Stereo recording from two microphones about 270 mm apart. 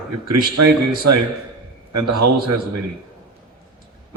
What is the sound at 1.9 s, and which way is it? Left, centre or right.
Speech, right.